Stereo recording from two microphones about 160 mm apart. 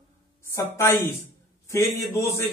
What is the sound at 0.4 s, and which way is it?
A man's voice, 15° left (ahead or behind).